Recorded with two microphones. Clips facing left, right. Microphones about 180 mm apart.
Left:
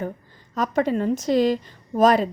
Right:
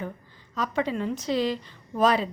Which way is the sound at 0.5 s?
50° left (ahead or behind).